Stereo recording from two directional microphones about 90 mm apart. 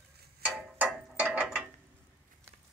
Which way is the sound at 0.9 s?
10° right (ahead or behind).